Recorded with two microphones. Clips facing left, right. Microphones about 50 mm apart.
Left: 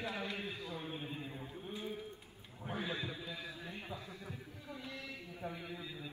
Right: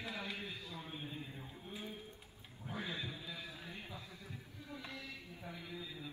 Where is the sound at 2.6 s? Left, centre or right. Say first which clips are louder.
Left 3 dB; left.